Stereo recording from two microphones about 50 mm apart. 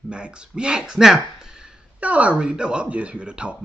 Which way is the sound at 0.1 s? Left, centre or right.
Centre.